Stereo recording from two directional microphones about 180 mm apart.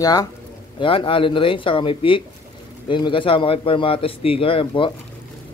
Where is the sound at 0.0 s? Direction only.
20° left (ahead or behind).